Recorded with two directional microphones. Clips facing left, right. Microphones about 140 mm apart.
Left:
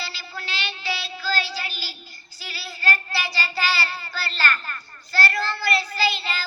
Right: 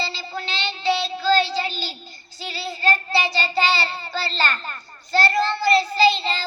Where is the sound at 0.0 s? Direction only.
25° right (ahead or behind).